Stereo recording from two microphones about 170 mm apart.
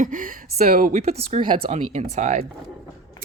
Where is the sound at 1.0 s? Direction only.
40° right (ahead or behind).